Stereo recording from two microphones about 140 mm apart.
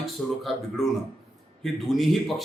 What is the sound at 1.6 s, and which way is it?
Speech, centre (ahead or behind).